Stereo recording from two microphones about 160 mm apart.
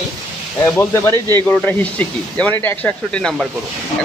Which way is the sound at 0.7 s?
15° left (ahead or behind).